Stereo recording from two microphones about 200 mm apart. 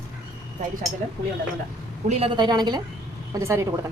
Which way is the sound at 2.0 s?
30° right (ahead or behind).